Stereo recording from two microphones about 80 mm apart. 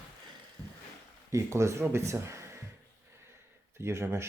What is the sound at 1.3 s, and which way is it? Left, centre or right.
Speech, right.